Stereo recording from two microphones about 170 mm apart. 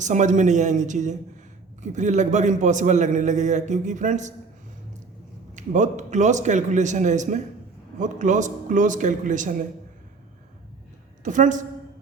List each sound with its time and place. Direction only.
0.0 s a man's voice: 45° right (ahead or behind)
5.5 s a man's voice: 45° right (ahead or behind)
11.2 s a woman's voice: 45° right (ahead or behind)